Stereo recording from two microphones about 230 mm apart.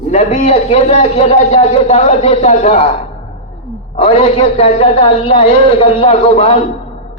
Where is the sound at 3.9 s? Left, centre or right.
Left.